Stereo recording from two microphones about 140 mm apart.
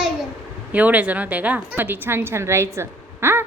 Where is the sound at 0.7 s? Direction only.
10° right (ahead or behind).